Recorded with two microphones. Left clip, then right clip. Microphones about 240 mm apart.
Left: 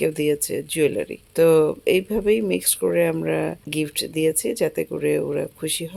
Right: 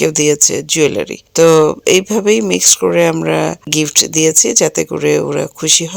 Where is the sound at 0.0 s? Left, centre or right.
Right.